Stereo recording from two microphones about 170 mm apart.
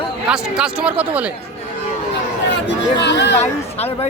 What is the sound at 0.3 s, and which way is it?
Speech, 5° right (ahead or behind).